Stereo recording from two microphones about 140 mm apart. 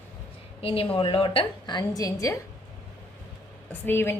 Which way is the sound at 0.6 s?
45° left (ahead or behind).